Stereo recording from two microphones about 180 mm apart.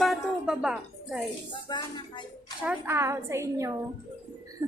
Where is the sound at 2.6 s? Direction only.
10° right (ahead or behind).